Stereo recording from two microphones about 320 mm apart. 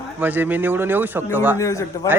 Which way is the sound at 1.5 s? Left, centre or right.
Centre.